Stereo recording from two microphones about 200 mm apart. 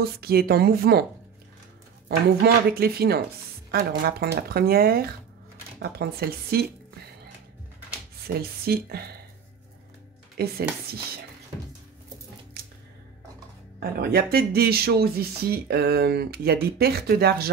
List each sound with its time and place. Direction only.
0.0 s speech: 50° right (ahead or behind)
2.0 s speech: 50° right (ahead or behind)
8.4 s speech: 50° right (ahead or behind)
10.4 s speech: 50° right (ahead or behind)
13.7 s speech: 50° right (ahead or behind)